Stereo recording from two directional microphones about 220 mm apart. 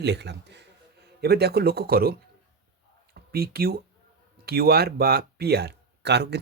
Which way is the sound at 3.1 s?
45° right (ahead or behind).